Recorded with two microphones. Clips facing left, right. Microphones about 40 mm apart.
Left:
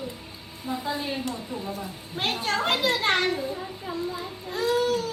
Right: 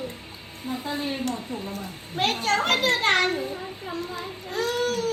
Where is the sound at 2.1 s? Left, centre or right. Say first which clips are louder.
Right 3 dB; right.